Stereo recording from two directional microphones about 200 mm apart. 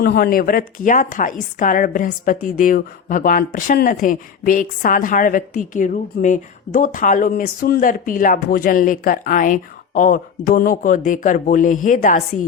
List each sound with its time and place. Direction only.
0.0 s speech: 50° left (ahead or behind)